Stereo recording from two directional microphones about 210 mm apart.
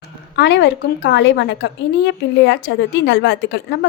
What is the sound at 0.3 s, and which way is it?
A woman's voice, 55° left (ahead or behind).